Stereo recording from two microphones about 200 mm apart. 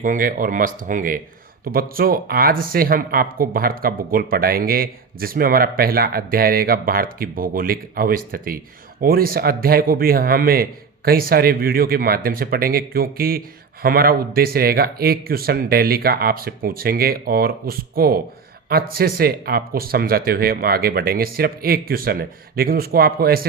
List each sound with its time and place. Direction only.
0.0 s speech: 45° right (ahead or behind)